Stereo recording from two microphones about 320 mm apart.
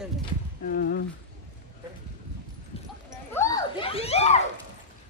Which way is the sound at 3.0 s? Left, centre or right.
Centre.